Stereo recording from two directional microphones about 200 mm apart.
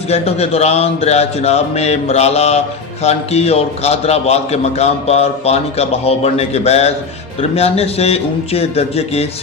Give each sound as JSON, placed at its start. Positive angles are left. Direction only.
{"t": 0.1, "sound": "a man's voice", "side_deg": 30}